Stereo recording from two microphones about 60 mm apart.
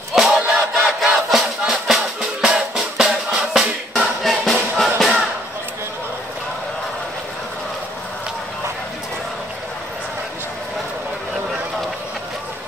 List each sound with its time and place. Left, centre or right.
0.1 s battle cry: centre
1.0 s music: centre
3.9 s music: centre